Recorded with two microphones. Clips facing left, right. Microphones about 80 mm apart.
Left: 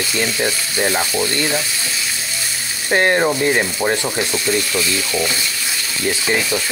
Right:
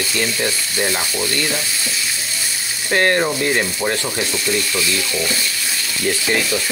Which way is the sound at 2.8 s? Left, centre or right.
Centre.